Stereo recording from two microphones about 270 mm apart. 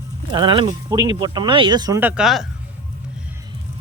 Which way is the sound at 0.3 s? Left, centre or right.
Centre.